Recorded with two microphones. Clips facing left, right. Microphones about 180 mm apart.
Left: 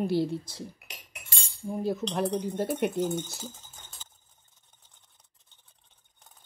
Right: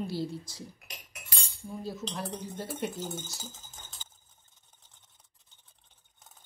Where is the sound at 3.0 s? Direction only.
Centre (ahead or behind).